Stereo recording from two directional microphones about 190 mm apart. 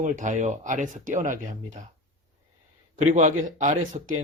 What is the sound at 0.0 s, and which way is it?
Speech, 40° right (ahead or behind).